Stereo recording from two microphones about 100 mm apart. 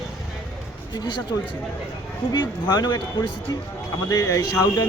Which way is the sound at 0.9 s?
45° left (ahead or behind).